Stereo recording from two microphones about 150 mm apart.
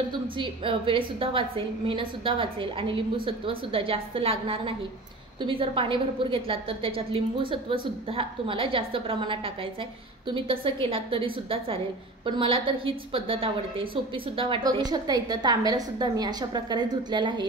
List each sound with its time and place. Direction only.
0.4 s a woman's voice: 35° right (ahead or behind)